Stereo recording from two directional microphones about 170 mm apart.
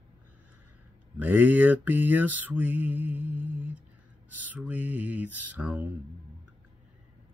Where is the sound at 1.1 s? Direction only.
10° right (ahead or behind).